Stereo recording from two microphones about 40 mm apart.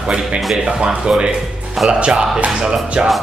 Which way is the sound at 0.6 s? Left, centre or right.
Right.